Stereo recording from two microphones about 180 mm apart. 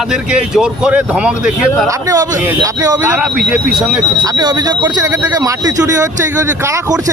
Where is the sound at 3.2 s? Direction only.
5° right (ahead or behind).